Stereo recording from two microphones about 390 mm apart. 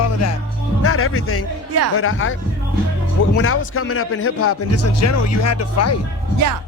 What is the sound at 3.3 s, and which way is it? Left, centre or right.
Speech, left.